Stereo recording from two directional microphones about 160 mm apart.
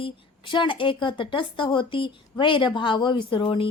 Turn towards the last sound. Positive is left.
turn(degrees=35)  # may be behind; listen again after turning